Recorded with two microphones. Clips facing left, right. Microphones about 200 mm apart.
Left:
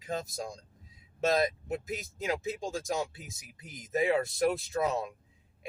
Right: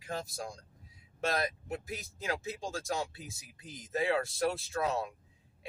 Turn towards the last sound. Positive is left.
turn(degrees=15)  # may be behind; listen again after turning